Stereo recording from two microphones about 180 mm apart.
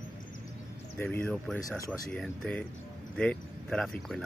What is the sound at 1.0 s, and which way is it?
Speech, 10° left (ahead or behind).